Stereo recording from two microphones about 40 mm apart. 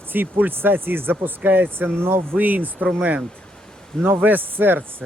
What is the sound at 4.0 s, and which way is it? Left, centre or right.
Speech, right.